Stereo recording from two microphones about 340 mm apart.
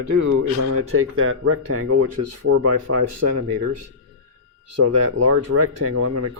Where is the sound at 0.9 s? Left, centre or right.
Right.